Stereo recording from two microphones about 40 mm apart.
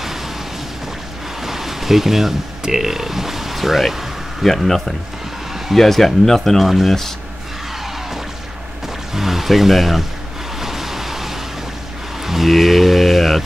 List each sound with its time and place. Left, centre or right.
1.4 s speech: centre
6.6 s speech: centre
8.8 s a sound: centre
10.6 s waves: centre
12.3 s speech: centre